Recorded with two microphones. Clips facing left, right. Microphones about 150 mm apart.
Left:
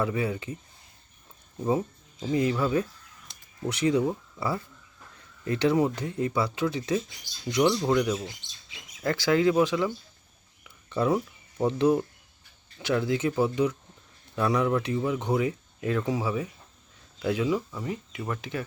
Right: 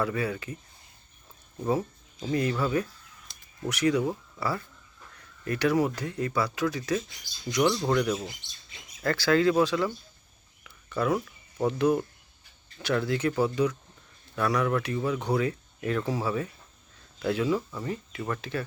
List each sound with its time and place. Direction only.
0.0 s speech: 20° left (ahead or behind)
2.3 s speech: 20° left (ahead or behind)
7.8 s speech: 10° left (ahead or behind)
8.1 s speech: 5° right (ahead or behind)
9.0 s speech: 20° left (ahead or behind)
10.6 s whispering: 20° left (ahead or behind)
11.6 s speech: 25° left (ahead or behind)